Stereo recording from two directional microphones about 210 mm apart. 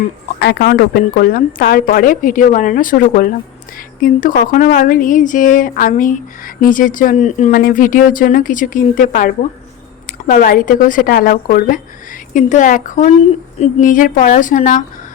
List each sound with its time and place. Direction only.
0.3 s a woman's voice: 50° left (ahead or behind)